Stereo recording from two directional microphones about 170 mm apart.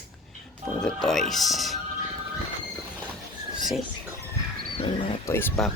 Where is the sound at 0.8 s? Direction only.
Centre (ahead or behind).